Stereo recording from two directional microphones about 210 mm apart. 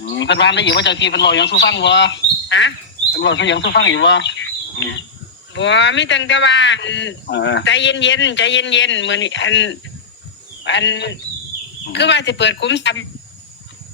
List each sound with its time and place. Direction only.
0.1 s a man's voice: 55° left (ahead or behind)